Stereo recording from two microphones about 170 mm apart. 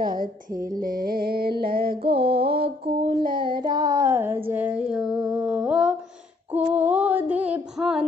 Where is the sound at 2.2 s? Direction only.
70° right (ahead or behind).